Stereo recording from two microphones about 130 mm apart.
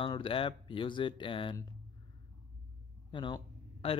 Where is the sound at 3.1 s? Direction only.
40° left (ahead or behind).